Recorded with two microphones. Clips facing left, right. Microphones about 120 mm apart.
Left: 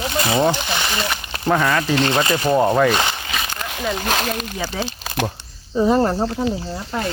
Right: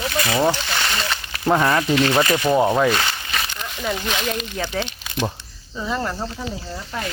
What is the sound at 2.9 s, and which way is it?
Speech, 20° left (ahead or behind).